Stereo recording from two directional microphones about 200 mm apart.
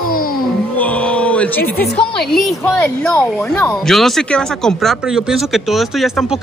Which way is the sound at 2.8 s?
10° left (ahead or behind).